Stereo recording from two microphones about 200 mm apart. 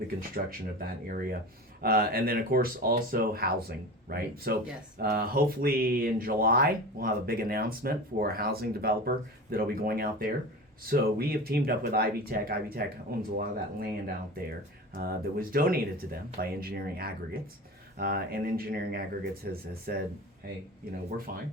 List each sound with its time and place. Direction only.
0.2 s speech: 45° right (ahead or behind)
21.3 s speech: 45° right (ahead or behind)